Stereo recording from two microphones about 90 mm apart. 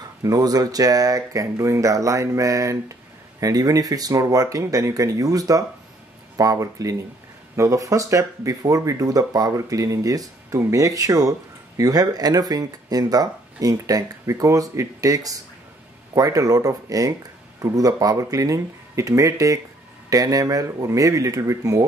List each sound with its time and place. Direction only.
0.2 s speech: 40° right (ahead or behind)